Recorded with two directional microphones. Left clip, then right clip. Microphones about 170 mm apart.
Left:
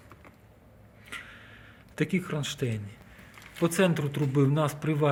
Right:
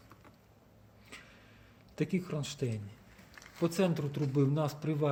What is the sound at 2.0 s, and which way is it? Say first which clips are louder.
Speech: left 5 dB; 10° right (ahead or behind).